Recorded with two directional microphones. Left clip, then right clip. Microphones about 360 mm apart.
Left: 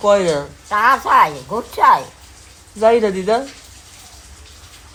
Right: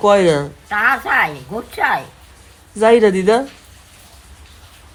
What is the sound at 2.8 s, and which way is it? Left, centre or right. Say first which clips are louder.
Speech: right 2 dB; centre.